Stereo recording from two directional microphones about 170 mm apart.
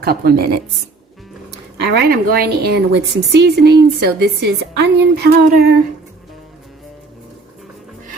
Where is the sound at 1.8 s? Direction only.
65° right (ahead or behind).